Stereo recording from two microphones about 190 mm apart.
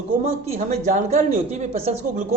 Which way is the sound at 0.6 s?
40° right (ahead or behind).